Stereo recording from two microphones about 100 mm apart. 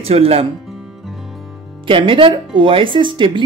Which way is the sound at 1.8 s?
60° right (ahead or behind).